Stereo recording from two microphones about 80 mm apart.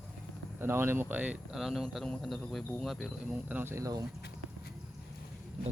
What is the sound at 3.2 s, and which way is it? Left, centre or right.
Speech, centre.